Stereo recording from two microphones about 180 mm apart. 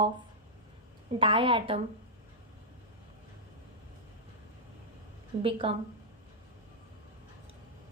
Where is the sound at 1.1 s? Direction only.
30° right (ahead or behind).